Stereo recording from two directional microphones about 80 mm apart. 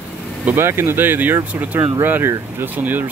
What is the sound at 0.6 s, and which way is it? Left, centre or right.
Speech, right.